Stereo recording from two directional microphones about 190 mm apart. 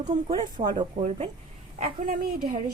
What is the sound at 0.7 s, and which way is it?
Speech, 35° right (ahead or behind).